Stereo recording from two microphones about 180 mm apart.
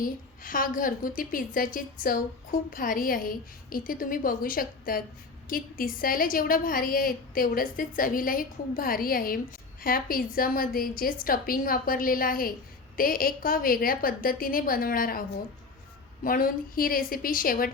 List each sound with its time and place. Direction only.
0.0 s a woman's voice: 50° left (ahead or behind)